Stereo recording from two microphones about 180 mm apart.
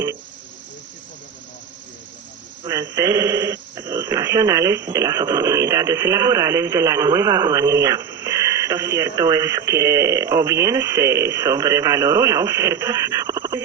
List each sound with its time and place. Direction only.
2.6 s speech: 15° right (ahead or behind)